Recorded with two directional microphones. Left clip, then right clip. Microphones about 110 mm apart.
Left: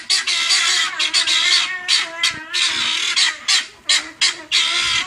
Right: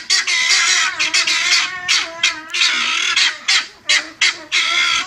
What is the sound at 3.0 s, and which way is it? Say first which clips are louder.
Bird: right 2 dB; 30° left (ahead or behind).